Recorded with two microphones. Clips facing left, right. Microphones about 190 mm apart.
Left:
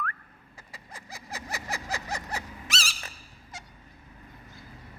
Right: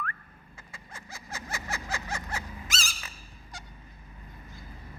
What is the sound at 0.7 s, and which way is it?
Vehicle, 35° left (ahead or behind).